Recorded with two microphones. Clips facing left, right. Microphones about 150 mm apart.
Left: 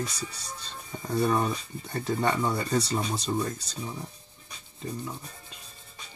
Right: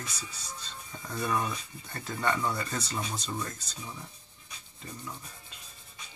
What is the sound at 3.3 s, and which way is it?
Speech, 25° left (ahead or behind).